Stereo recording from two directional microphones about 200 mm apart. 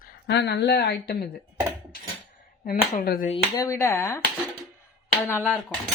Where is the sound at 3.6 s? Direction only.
15° left (ahead or behind).